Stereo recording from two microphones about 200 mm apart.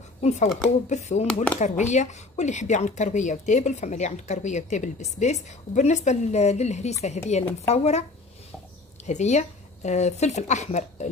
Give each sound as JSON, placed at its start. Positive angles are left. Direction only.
{"t": 0.2, "sound": "speech", "side_deg": 35}
{"t": 1.2, "sound": "speech", "side_deg": 5}
{"t": 1.6, "sound": "speech", "side_deg": 35}
{"t": 9.0, "sound": "a woman's voice", "side_deg": 35}